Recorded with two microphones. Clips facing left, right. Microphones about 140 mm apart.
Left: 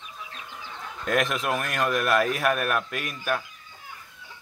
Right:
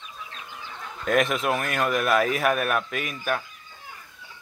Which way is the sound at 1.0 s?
Centre (ahead or behind).